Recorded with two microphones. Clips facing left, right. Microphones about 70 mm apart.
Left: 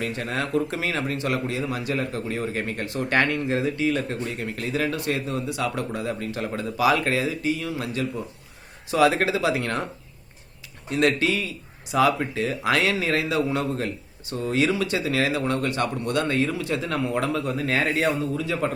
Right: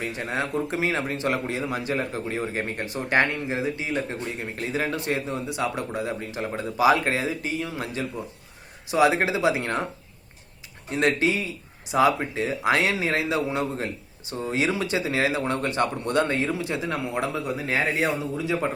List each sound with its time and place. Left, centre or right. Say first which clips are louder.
0.0 s speech: left 1 dB; right
10.9 s speech: left 1 dB; right